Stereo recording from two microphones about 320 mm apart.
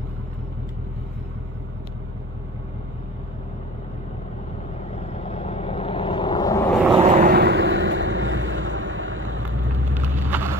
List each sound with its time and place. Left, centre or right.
4.9 s vehicle: centre
7.0 s vehicle: right
9.9 s vehicle: centre